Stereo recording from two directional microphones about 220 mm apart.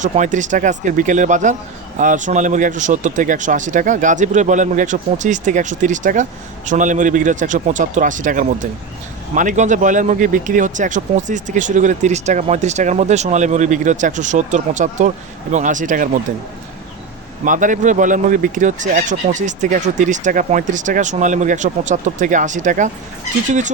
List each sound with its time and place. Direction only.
0.0 s speech: 35° right (ahead or behind)
17.4 s speech: 35° right (ahead or behind)